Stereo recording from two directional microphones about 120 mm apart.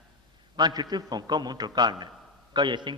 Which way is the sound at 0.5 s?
35° right (ahead or behind).